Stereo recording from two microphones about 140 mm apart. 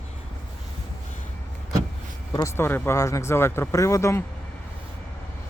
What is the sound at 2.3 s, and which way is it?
Speech, 20° left (ahead or behind).